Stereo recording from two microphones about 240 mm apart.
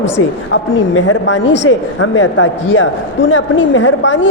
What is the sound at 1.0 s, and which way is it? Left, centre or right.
A man's voice, left.